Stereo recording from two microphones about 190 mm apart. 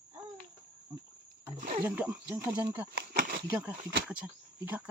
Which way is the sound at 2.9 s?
50° right (ahead or behind).